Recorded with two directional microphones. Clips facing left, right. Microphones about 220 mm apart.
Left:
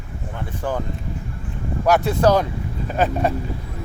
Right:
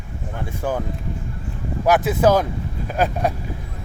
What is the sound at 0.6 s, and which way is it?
Speech, 15° right (ahead or behind).